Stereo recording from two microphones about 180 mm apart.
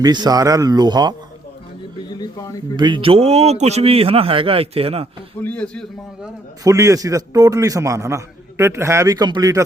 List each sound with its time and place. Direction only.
0.0 s a man's voice: 20° right (ahead or behind)
2.1 s speech: 20° left (ahead or behind)
2.7 s a man's voice: 25° right (ahead or behind)
5.4 s a man's voice: 10° left (ahead or behind)
6.7 s a man's voice: 20° right (ahead or behind)